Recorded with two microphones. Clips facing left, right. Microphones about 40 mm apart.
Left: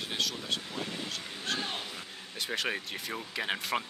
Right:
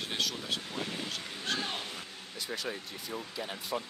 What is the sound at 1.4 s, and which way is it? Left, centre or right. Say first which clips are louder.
Speech: even; centre.